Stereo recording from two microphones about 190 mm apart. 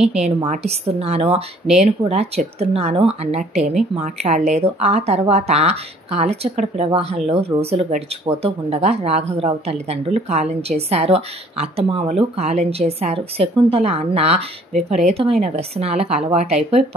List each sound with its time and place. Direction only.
0.5 s speech: 35° right (ahead or behind)